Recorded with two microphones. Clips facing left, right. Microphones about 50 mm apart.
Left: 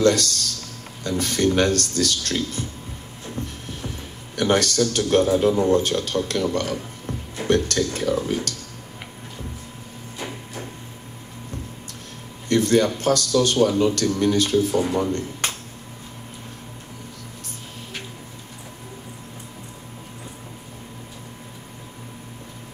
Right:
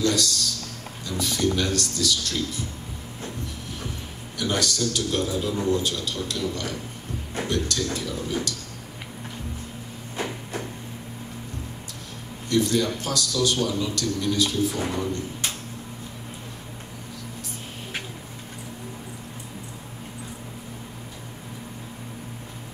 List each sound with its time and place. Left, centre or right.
0.0 s a man's voice: left
4.4 s a man's voice: left
12.4 s a man's voice: left